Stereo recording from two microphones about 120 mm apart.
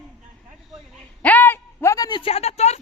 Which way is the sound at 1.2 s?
15° left (ahead or behind).